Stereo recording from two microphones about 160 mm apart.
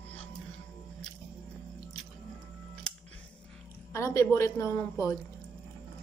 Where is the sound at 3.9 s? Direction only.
20° left (ahead or behind).